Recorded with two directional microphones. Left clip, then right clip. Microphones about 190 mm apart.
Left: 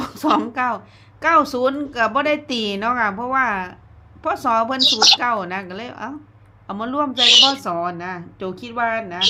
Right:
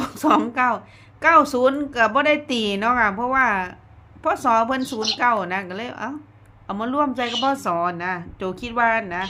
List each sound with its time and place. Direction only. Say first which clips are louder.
0.0 s a woman's voice: even; centre (ahead or behind)
4.9 s speech: left 11 dB; 70° left (ahead or behind)
5.2 s a woman's voice: right 1 dB; centre (ahead or behind)